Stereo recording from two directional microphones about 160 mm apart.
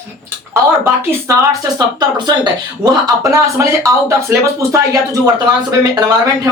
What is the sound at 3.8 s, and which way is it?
Speech, 15° right (ahead or behind).